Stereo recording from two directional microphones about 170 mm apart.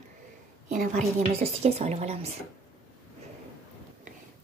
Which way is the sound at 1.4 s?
40° right (ahead or behind).